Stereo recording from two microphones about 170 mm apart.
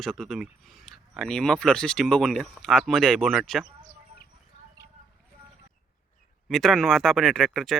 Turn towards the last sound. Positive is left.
turn(degrees=0)  # may be behind; listen again after turning